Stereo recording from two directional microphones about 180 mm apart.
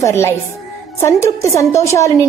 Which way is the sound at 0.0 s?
15° left (ahead or behind).